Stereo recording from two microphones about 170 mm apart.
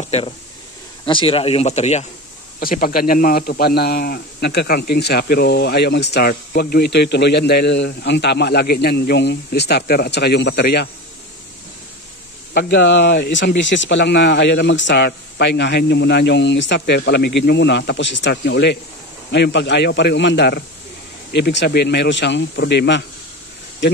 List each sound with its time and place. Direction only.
0.0 s speech: 40° left (ahead or behind)
2.6 s a man's voice: 60° left (ahead or behind); by 10.9 s 75° left (ahead or behind)
12.5 s speech: 90° left
21.3 s speech: 90° left